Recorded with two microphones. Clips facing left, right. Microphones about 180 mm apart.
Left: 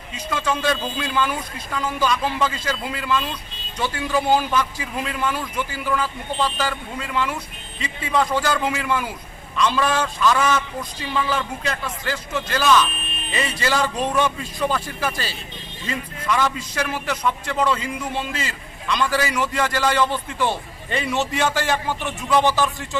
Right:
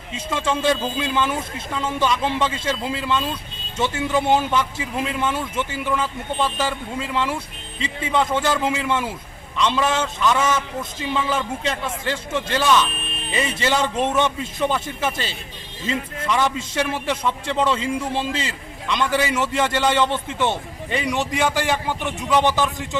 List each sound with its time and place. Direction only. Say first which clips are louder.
0.1 s a man's voice: right 1 dB; 25° right (ahead or behind)